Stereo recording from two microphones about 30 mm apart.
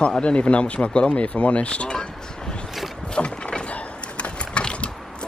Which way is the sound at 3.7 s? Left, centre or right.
Left.